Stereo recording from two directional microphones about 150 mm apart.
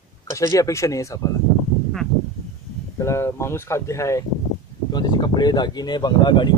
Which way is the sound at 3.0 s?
20° left (ahead or behind).